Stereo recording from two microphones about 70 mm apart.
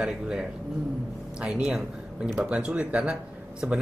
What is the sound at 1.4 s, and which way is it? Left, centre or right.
Speech, centre.